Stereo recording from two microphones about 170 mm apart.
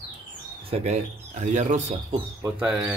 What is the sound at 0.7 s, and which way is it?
Speech, 40° right (ahead or behind).